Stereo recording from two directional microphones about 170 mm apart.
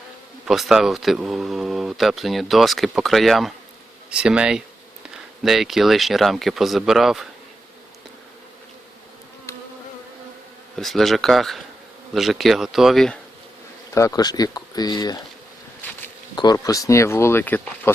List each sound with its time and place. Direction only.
0.4 s speech: centre (ahead or behind)
10.8 s speech: centre (ahead or behind)
13.9 s speech: 20° left (ahead or behind)
16.3 s speech: 25° left (ahead or behind)